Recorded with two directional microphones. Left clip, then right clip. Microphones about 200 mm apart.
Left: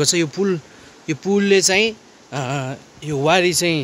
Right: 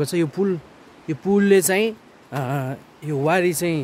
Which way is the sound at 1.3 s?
20° right (ahead or behind).